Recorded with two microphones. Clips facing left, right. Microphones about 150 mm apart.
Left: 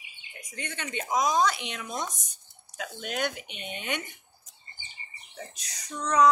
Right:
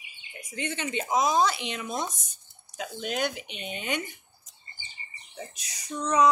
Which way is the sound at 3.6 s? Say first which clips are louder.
Right 2 dB; centre (ahead or behind).